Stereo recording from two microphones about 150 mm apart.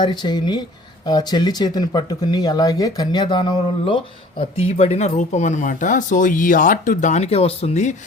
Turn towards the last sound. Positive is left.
turn(degrees=45)  # may be behind; listen again after turning